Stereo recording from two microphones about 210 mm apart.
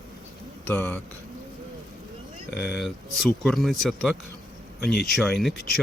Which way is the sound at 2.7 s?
Centre (ahead or behind).